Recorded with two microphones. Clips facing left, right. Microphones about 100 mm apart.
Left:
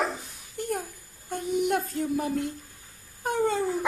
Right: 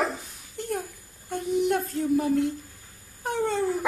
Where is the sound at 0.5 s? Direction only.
Centre (ahead or behind).